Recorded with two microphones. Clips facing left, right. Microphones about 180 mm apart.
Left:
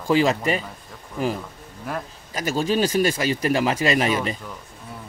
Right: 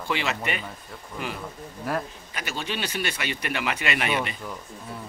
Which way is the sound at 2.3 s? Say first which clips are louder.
Left 10 dB; 40° left (ahead or behind).